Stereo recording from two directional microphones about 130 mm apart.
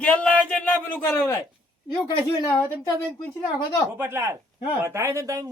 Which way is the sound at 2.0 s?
35° left (ahead or behind).